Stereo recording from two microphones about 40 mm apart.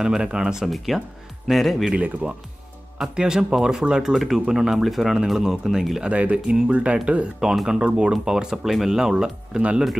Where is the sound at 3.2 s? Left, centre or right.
Centre.